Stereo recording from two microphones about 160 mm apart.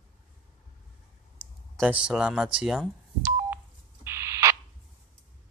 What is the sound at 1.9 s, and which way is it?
Speech, 5° right (ahead or behind).